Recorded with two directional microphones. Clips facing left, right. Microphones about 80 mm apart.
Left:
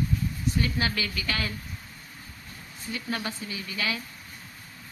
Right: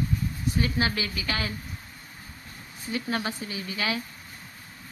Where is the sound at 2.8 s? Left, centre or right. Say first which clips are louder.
Right 3 dB; right.